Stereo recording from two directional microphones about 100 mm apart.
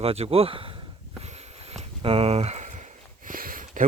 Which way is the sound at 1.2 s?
80° right.